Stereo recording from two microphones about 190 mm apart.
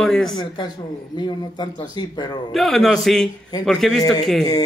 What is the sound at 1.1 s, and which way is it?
Speech, 20° left (ahead or behind).